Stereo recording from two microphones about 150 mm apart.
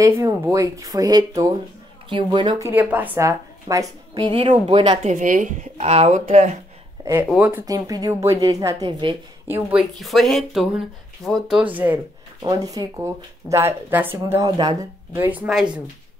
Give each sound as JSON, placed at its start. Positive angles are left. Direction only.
{"t": 0.0, "sound": "speech", "side_deg": -20}
{"t": 2.6, "sound": "a woman's voice", "side_deg": -10}
{"t": 4.4, "sound": "speech", "side_deg": -40}
{"t": 5.0, "sound": "speech", "side_deg": -65}
{"t": 7.2, "sound": "speech", "side_deg": -10}
{"t": 7.6, "sound": "speech", "side_deg": -25}
{"t": 9.5, "sound": "speech", "side_deg": -10}
{"t": 12.4, "sound": "speech", "side_deg": -25}